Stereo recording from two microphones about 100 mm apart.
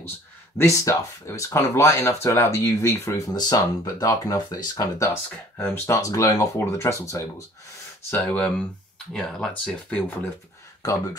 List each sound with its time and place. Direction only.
0.6 s speech: 30° left (ahead or behind)
3.3 s speech: 40° left (ahead or behind)
8.1 s speech: 15° left (ahead or behind)